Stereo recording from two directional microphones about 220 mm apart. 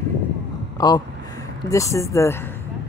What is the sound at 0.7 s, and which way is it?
Speech, 20° left (ahead or behind).